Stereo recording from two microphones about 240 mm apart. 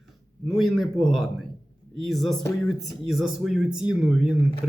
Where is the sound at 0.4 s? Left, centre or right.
Centre.